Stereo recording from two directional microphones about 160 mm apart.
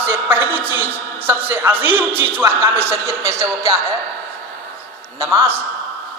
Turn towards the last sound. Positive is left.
turn(degrees=-15)  # may be behind; listen again after turning